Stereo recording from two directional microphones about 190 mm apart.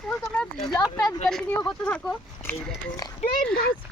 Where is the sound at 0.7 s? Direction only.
20° left (ahead or behind).